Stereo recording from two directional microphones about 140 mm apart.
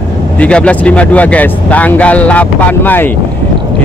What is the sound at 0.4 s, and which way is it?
Speech, 10° left (ahead or behind).